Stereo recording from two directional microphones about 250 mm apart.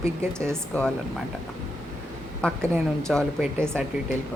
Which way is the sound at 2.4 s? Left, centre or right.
Centre.